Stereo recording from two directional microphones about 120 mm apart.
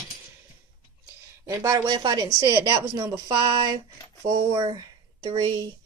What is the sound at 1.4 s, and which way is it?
Speech, 30° right (ahead or behind).